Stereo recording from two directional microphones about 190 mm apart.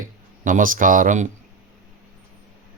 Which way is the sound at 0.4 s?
45° right (ahead or behind).